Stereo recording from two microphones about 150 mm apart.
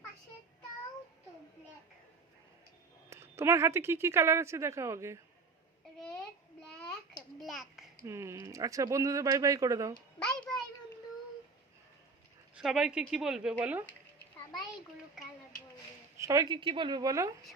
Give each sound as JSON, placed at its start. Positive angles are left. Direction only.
{"t": 3.1, "sound": "speech", "side_deg": -20}
{"t": 7.3, "sound": "a sound", "side_deg": 0}
{"t": 8.0, "sound": "speech", "side_deg": -15}
{"t": 10.2, "sound": "a sound", "side_deg": 5}
{"t": 12.5, "sound": "speech", "side_deg": -5}
{"t": 16.1, "sound": "speech", "side_deg": -20}